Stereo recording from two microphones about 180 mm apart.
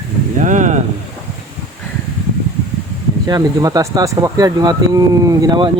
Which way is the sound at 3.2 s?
20° right (ahead or behind).